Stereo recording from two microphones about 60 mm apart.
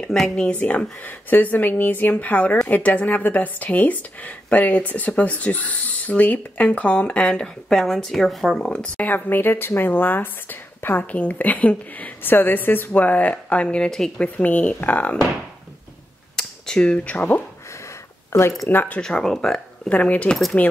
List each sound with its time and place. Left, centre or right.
0.1 s speech: centre
0.5 s speech: left
7.4 s speech: centre
8.5 s speech: centre
9.1 s speech: left
11.1 s speech: left
13.8 s speech: centre
14.3 s speech: left
16.3 s speech: centre; by 17.4 s left
18.3 s speech: left
18.7 s speech: left
18.9 s speech: centre
19.9 s speech: left